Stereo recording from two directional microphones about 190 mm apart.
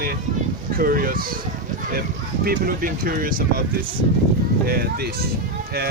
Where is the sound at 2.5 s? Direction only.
50° right (ahead or behind).